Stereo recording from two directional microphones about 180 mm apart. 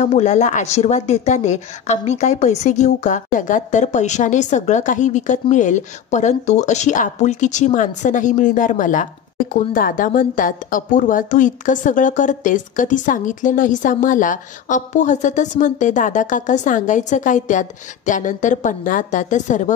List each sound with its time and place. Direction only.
0.0 s a woman's voice: 40° left (ahead or behind)